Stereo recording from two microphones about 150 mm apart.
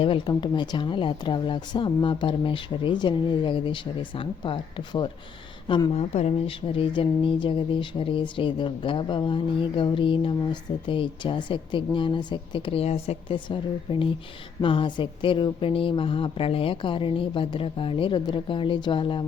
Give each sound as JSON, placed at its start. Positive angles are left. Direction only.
{"t": 0.0, "sound": "speech", "side_deg": 35}